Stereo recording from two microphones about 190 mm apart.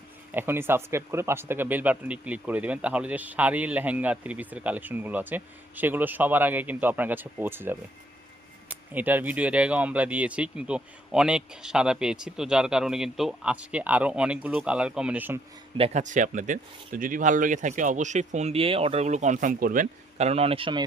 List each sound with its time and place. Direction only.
0.3 s speech: 10° right (ahead or behind)
8.9 s speech: 10° right (ahead or behind)
15.8 s speech: 40° right (ahead or behind)